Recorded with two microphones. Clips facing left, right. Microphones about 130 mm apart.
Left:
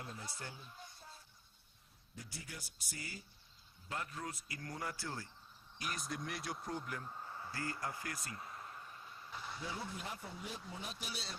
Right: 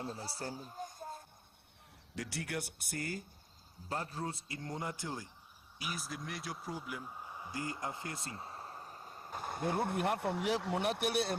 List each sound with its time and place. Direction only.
0.0 s speech: 35° right (ahead or behind); by 1.2 s 50° right (ahead or behind)
2.1 s speech: 80° right; by 3.2 s 50° right (ahead or behind)
3.8 s speech: 35° right (ahead or behind); by 5.3 s 15° right (ahead or behind)
5.8 s a man's voice: 5° right (ahead or behind); by 11.3 s 60° right (ahead or behind)